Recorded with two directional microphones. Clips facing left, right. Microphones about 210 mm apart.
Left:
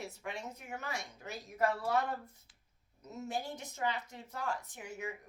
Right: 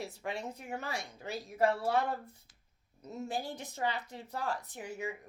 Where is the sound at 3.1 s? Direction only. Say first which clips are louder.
Right 2 dB; 30° right (ahead or behind).